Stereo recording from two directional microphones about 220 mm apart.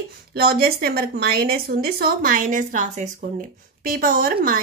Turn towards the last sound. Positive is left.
turn(degrees=-40)  # may be behind; listen again after turning